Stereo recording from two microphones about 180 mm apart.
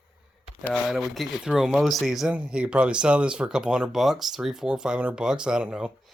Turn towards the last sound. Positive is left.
turn(degrees=-5)  # may be behind; listen again after turning